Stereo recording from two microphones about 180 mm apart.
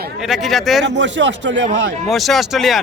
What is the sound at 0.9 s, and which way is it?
Speech, 90° right.